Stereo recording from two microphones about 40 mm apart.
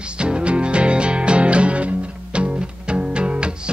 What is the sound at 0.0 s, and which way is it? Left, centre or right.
Music, right.